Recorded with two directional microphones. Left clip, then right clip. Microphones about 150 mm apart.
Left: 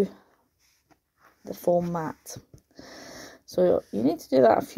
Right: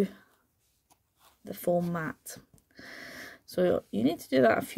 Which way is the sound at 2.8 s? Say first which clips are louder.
Even; 90° right.